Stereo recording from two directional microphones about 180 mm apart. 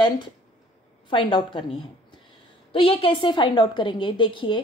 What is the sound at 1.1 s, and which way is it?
A woman's voice, 30° left (ahead or behind).